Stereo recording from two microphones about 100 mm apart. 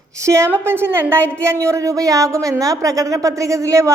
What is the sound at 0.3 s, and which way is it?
Speech, 30° right (ahead or behind).